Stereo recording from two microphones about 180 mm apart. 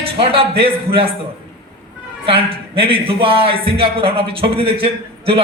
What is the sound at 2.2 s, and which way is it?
Speech, 30° right (ahead or behind).